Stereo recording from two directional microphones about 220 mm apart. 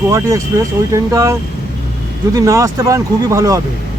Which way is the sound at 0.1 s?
15° right (ahead or behind).